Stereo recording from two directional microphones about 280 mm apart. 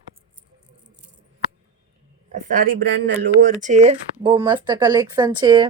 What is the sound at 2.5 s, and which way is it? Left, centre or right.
Speech, right.